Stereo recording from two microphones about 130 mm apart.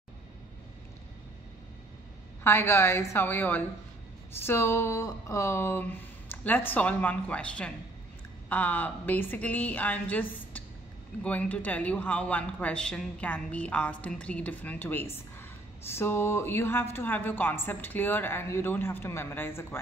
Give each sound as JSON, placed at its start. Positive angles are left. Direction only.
{"t": 2.4, "sound": "a woman's voice", "side_deg": 20}